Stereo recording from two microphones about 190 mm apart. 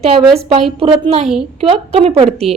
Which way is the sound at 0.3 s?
30° right (ahead or behind).